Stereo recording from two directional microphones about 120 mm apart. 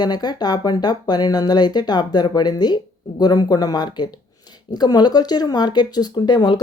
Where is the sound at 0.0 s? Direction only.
35° left (ahead or behind).